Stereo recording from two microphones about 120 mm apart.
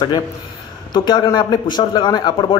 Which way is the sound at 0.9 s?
35° left (ahead or behind).